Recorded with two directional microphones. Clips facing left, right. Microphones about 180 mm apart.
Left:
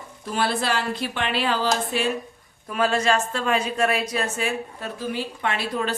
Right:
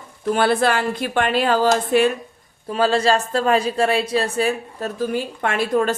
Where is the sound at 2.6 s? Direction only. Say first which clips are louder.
Right 4 dB; 30° right (ahead or behind).